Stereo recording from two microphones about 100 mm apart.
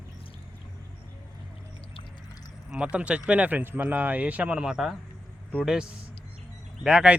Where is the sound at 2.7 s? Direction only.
10° right (ahead or behind).